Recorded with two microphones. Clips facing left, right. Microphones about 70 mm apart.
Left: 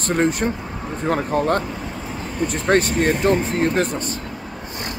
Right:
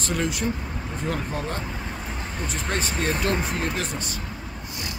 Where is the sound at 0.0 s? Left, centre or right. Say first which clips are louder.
Left 7 dB; left.